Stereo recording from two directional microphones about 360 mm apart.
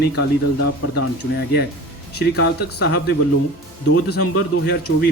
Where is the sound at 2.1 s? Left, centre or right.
Left.